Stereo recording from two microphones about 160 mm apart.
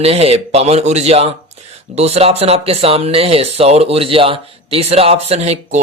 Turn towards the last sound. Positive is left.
turn(degrees=-45)  # may be behind; listen again after turning